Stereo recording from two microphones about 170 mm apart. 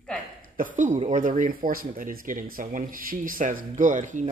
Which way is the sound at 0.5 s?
50° right (ahead or behind).